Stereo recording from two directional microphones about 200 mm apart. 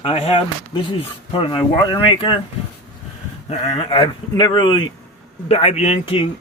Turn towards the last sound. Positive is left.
turn(degrees=30)  # may be behind; listen again after turning